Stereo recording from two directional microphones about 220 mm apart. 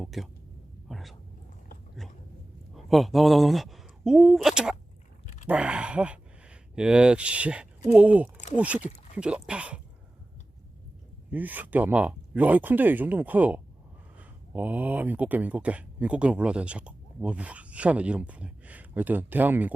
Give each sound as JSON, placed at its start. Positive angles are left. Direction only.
{"t": 0.0, "sound": "speech", "side_deg": 0}
{"t": 0.9, "sound": "a sound", "side_deg": 0}
{"t": 2.0, "sound": "dog", "side_deg": 0}
{"t": 2.7, "sound": "speech", "side_deg": 0}
{"t": 5.2, "sound": "a sound", "side_deg": 30}
{"t": 5.5, "sound": "speech", "side_deg": -5}
{"t": 11.3, "sound": "speech", "side_deg": -5}